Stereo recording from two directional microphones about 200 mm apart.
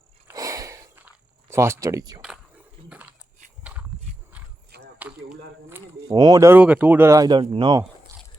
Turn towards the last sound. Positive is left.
turn(degrees=-25)  # may be behind; listen again after turning